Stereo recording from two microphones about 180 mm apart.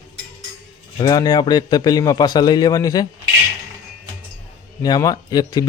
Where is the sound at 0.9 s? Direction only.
20° left (ahead or behind).